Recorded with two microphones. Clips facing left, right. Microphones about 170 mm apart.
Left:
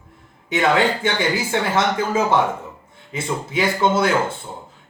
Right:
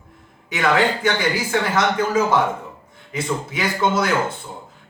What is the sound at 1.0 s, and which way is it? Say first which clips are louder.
Speech: even; 25° left (ahead or behind).